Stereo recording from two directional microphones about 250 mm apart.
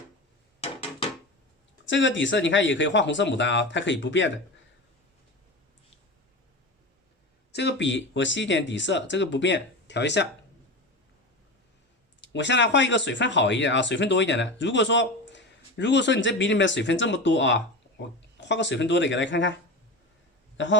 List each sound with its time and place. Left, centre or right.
1.8 s speech: left
7.5 s speech: left
12.2 s speech: left